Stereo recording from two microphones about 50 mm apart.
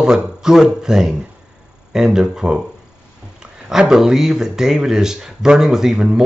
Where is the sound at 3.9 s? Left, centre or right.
Centre.